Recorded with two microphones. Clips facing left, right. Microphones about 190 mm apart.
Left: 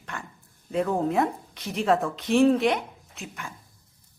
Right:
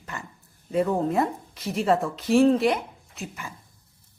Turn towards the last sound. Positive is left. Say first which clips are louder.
# right 2 dB
turn(degrees=0)  # may be behind; listen again after turning